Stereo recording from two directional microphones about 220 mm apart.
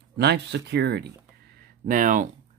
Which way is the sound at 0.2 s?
50° right (ahead or behind).